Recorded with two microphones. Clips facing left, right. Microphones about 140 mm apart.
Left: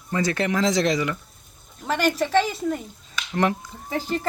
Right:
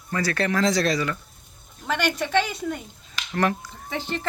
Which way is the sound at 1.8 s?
5° left (ahead or behind).